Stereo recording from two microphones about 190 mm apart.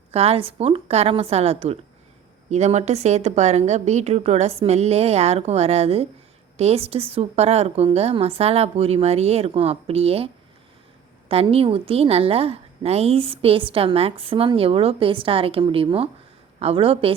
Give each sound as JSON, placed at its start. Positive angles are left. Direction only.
{"t": 0.1, "sound": "a woman's voice", "side_deg": -30}
{"t": 11.3, "sound": "a woman's voice", "side_deg": -30}